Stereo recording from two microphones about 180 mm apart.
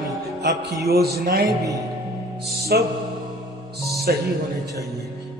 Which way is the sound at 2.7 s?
60° right (ahead or behind).